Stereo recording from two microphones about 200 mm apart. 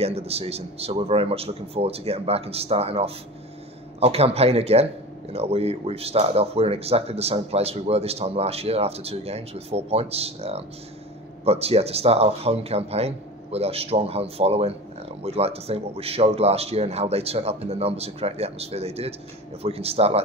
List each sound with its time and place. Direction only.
0.0 s speech: 30° right (ahead or behind)